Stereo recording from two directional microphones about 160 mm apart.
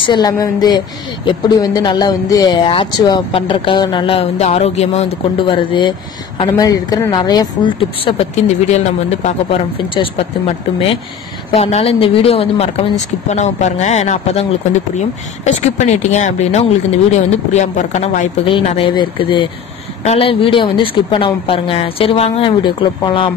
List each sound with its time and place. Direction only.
0.0 s speech: 25° left (ahead or behind)
5.5 s speech: 30° left (ahead or behind); by 18.3 s 45° left (ahead or behind)
18.4 s speech: 35° left (ahead or behind)